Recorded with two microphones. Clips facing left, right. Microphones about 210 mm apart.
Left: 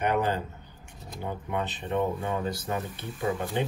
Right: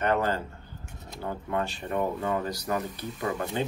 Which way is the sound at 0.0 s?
15° left (ahead or behind).